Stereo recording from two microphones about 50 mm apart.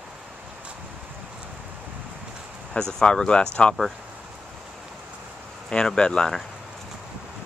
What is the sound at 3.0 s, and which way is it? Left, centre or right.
Speech, centre.